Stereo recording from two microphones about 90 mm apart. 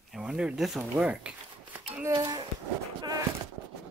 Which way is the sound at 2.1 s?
45° right (ahead or behind).